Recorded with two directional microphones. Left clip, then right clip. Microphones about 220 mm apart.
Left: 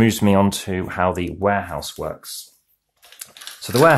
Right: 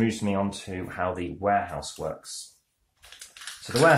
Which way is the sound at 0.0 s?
45° left (ahead or behind).